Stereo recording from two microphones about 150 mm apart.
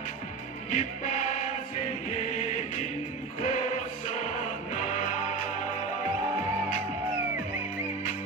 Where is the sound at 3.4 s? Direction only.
55° left (ahead or behind).